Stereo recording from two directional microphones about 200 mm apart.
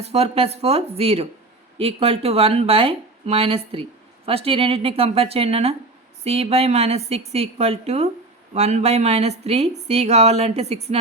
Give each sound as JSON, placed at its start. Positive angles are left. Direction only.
{"t": 0.0, "sound": "speech", "side_deg": -30}